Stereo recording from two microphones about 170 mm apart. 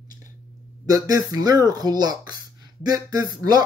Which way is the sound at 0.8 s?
20° right (ahead or behind).